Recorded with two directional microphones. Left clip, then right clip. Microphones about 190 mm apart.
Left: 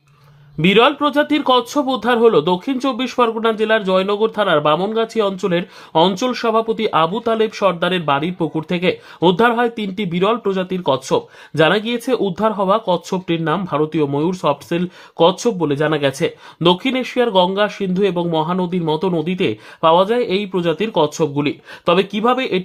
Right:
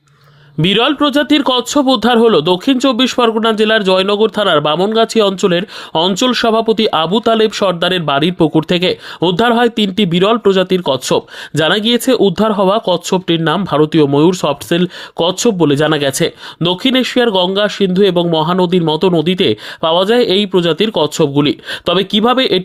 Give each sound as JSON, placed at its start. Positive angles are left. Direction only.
{"t": 0.6, "sound": "speech", "side_deg": -35}